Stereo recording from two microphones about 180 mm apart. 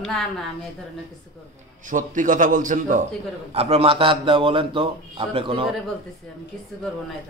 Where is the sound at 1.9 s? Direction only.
45° right (ahead or behind).